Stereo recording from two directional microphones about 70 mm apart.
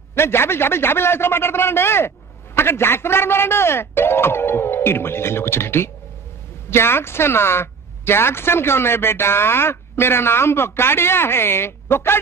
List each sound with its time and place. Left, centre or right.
0.1 s a man's voice: left